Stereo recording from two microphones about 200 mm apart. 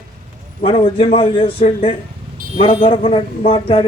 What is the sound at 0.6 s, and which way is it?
A man's voice, 30° left (ahead or behind).